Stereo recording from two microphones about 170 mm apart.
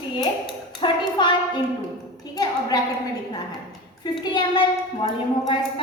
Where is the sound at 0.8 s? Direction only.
25° left (ahead or behind).